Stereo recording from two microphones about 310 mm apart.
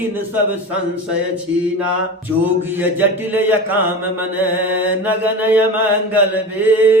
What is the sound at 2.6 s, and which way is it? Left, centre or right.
Mantra, centre.